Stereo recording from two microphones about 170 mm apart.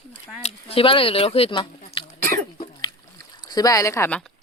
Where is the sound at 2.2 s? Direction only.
55° right (ahead or behind).